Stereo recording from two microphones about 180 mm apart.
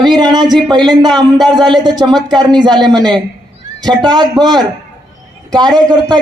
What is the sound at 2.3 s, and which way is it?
Speech, 5° left (ahead or behind).